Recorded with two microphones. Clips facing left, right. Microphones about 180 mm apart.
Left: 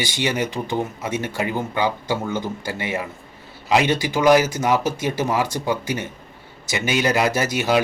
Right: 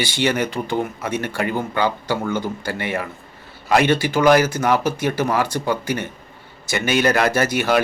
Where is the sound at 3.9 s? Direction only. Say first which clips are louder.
Right 1 dB; 15° left (ahead or behind).